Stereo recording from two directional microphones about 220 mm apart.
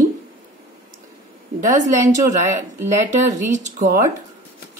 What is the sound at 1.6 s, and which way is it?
A woman's voice, 35° right (ahead or behind).